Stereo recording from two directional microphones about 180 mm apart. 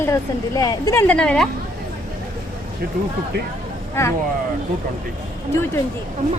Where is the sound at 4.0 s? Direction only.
15° left (ahead or behind).